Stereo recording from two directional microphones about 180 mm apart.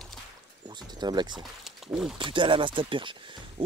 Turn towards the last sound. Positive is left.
turn(degrees=-25)  # may be behind; listen again after turning